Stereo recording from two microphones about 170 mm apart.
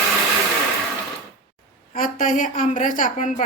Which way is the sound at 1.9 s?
50° left (ahead or behind).